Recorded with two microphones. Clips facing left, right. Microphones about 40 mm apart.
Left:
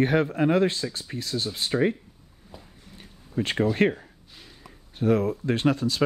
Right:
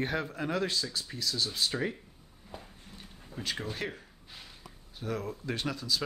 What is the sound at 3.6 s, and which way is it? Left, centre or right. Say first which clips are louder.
Speech: left 14 dB; left.